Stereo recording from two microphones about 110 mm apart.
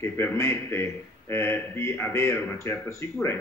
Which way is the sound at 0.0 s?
20° left (ahead or behind).